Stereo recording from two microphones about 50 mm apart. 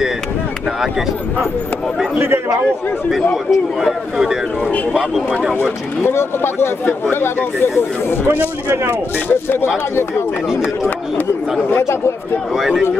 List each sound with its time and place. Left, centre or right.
3.8 s speech: centre
6.0 s speech: left
8.3 s speech: right
9.3 s speech: left
11.7 s speech: left
12.5 s speech: centre